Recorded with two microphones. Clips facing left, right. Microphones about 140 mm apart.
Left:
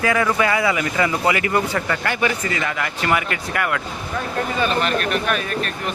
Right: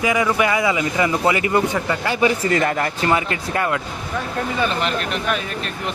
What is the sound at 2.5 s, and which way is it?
Speech, 45° right (ahead or behind).